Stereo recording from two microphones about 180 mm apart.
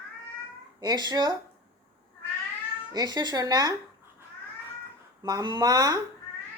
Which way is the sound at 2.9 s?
20° right (ahead or behind).